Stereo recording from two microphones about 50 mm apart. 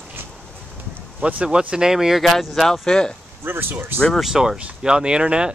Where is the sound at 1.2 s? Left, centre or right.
Right; by 2.3 s centre.